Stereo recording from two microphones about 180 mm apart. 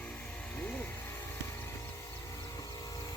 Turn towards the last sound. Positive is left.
turn(degrees=20)  # may be behind; listen again after turning